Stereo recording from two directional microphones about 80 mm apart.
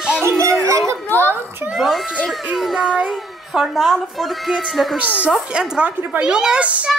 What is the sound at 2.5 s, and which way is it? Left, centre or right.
Dog, centre.